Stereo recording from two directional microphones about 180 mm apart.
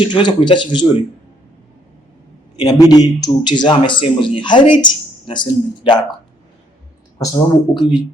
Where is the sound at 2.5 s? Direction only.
25° left (ahead or behind).